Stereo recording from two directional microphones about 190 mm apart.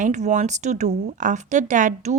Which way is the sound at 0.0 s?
40° right (ahead or behind).